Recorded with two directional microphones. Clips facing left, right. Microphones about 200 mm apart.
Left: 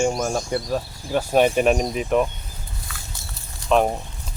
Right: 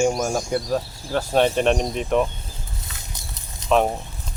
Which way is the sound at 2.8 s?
20° right (ahead or behind).